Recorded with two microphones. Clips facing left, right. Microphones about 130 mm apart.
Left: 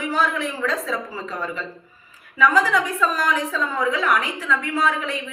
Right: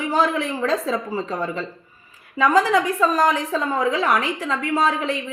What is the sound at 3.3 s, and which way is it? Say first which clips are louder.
A woman's voice: right 2 dB; 35° right (ahead or behind).